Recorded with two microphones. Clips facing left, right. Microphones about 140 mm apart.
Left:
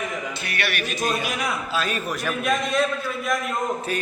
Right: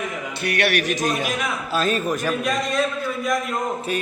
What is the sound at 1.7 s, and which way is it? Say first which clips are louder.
Speech: right 7 dB; 40° right (ahead or behind).